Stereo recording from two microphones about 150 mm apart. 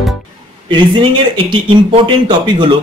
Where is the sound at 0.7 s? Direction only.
35° right (ahead or behind).